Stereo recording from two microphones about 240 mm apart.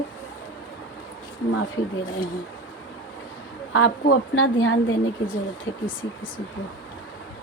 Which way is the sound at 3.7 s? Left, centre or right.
Left.